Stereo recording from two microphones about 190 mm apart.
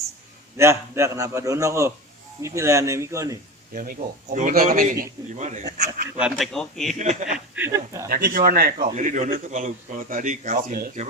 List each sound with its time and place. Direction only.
0.5 s a man's voice: 15° right (ahead or behind)
3.8 s a man's voice: 45° right (ahead or behind)
6.1 s speech: 5° right (ahead or behind)
7.0 s speech: 40° right (ahead or behind)
7.3 s a man's voice: 10° right (ahead or behind)
8.1 s a man's voice: 50° right (ahead or behind)